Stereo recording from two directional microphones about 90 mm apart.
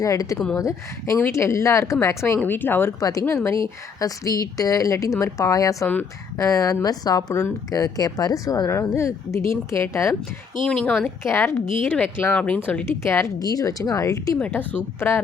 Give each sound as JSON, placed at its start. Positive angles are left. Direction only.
{"t": 0.0, "sound": "speech", "side_deg": 40}
{"t": 2.4, "sound": "a woman's voice", "side_deg": 20}
{"t": 3.0, "sound": "speech", "side_deg": 40}
{"t": 4.0, "sound": "speech", "side_deg": 40}
{"t": 5.8, "sound": "speech", "side_deg": 15}
{"t": 6.3, "sound": "a woman's voice", "side_deg": 40}
{"t": 10.7, "sound": "speech", "side_deg": 10}
{"t": 11.2, "sound": "a woman's voice", "side_deg": 30}
{"t": 12.3, "sound": "speech", "side_deg": 10}
{"t": 12.9, "sound": "a woman's voice", "side_deg": 30}
{"t": 13.4, "sound": "speech", "side_deg": 40}
{"t": 14.3, "sound": "a woman's voice", "side_deg": 15}